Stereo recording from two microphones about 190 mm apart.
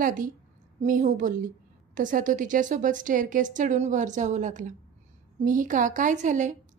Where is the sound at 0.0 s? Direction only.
45° right (ahead or behind).